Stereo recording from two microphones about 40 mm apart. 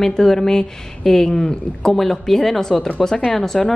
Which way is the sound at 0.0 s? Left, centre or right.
Centre.